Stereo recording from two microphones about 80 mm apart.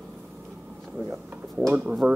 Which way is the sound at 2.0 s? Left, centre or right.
Right.